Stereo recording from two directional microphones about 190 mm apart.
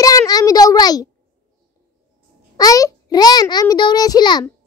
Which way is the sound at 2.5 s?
20° left (ahead or behind).